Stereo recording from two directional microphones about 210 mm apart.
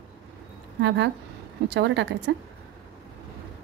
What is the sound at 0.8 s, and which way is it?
A woman's voice, 60° right (ahead or behind).